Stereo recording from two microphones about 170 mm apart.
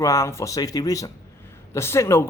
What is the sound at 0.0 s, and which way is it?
Speech, 15° left (ahead or behind).